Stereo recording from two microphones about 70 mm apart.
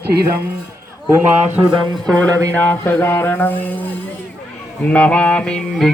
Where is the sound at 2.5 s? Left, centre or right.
Left.